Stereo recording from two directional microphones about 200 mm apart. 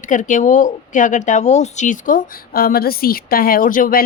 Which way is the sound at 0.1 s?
40° left (ahead or behind).